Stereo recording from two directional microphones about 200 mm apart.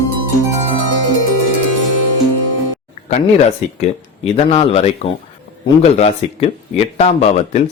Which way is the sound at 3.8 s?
30° left (ahead or behind).